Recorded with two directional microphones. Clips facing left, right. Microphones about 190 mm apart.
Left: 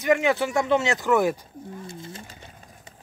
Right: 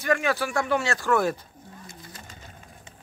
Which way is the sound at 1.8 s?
25° left (ahead or behind).